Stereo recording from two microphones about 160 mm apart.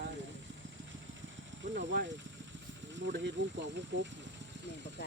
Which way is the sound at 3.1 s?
90° right.